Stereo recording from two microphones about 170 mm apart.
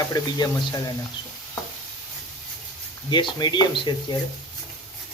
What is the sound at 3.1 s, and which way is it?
Speech, 25° left (ahead or behind).